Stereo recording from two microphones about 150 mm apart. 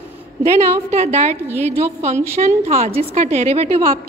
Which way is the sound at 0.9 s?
50° right (ahead or behind).